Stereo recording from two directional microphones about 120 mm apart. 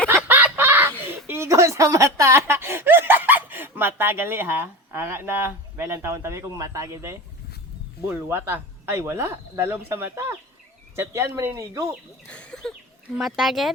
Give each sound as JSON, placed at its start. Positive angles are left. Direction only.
{"t": 0.1, "sound": "chicken", "side_deg": -15}
{"t": 1.0, "sound": "speech", "side_deg": -20}
{"t": 12.3, "sound": "speech", "side_deg": 10}